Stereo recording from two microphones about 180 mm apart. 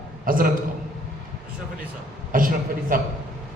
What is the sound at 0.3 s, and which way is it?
Speech, 50° right (ahead or behind).